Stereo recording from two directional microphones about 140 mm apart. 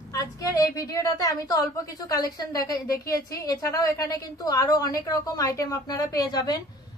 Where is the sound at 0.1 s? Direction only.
25° left (ahead or behind).